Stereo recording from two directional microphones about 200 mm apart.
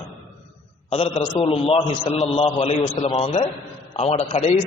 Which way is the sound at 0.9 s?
25° left (ahead or behind).